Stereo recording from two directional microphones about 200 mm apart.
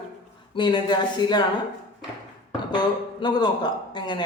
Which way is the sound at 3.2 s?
20° left (ahead or behind).